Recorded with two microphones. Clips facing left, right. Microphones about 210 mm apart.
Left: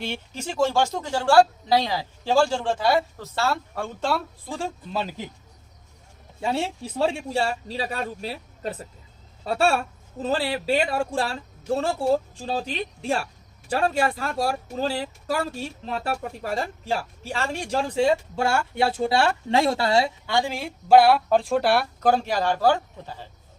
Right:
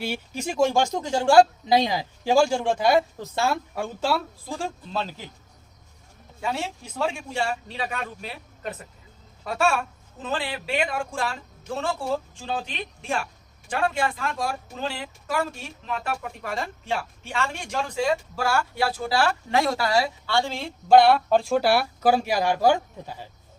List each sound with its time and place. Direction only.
0.0 s speech: 10° right (ahead or behind); by 5.1 s 10° left (ahead or behind)
6.4 s a man's voice: 30° left (ahead or behind); by 23.3 s 10° right (ahead or behind)